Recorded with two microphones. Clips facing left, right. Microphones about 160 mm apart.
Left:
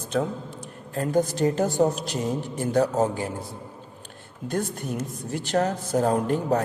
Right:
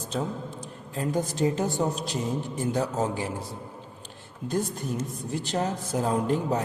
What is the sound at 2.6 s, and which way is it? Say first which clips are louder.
Speech: left 6 dB; 65° left (ahead or behind).